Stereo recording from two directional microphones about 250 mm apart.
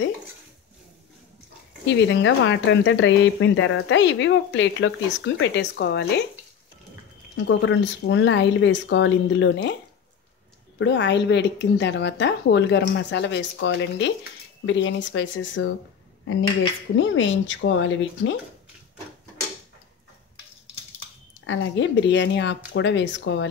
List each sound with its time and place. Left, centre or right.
1.9 s speech: left
7.4 s speech: left
10.8 s speech: left
16.9 s speech: left
21.5 s speech: left